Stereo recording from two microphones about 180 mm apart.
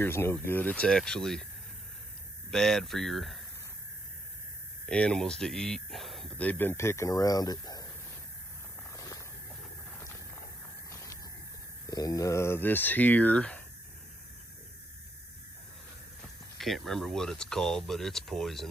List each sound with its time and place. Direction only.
0.0 s speech: 15° left (ahead or behind)
2.5 s speech: centre (ahead or behind)
4.8 s speech: 5° left (ahead or behind); by 7.8 s 20° left (ahead or behind)
8.9 s a sound: 20° left (ahead or behind)
11.8 s speech: 20° left (ahead or behind)
16.2 s speech: centre (ahead or behind)